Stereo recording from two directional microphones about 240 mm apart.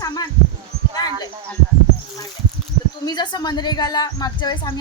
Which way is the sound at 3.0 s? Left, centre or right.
Centre.